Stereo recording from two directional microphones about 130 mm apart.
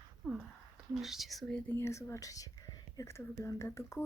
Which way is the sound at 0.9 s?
Centre (ahead or behind).